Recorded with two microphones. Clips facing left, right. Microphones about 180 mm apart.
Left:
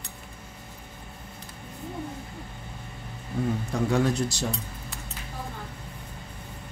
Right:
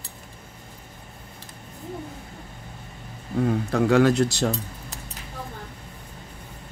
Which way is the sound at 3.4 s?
70° right (ahead or behind).